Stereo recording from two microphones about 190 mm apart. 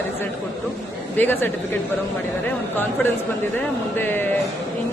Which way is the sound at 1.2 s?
10° left (ahead or behind).